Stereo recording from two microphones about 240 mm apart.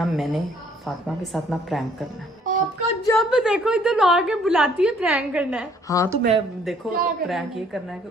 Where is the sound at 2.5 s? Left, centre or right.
Right.